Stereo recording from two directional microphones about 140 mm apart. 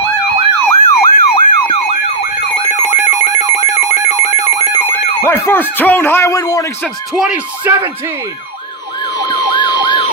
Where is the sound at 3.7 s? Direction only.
50° left (ahead or behind).